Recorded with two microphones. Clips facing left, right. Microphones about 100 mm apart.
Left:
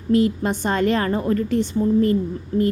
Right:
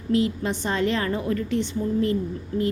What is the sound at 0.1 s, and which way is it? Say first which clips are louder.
A woman's voice: left 4 dB; 45° left (ahead or behind).